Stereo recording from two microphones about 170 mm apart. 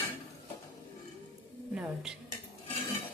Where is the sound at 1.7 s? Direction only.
5° right (ahead or behind).